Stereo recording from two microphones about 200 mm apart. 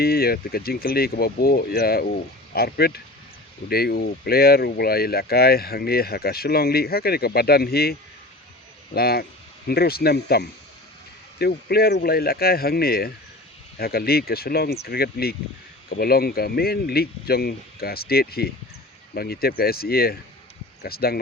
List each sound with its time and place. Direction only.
0.0 s speech: 50° left (ahead or behind)